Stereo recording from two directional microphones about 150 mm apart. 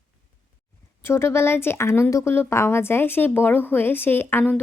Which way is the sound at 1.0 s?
15° left (ahead or behind).